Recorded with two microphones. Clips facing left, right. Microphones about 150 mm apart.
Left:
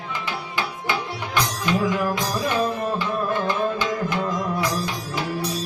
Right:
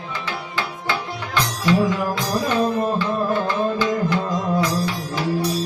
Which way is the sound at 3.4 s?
20° left (ahead or behind).